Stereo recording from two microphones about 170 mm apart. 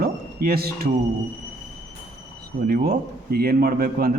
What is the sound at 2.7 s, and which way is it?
Speech, 60° right (ahead or behind).